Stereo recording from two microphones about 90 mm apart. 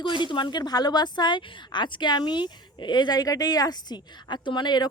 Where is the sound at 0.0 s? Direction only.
60° left (ahead or behind).